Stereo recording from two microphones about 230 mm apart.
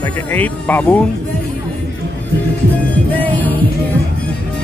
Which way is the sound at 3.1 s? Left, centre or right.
Centre.